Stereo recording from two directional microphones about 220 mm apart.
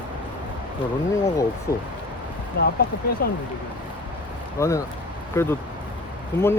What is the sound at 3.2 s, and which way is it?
Speech, 45° left (ahead or behind).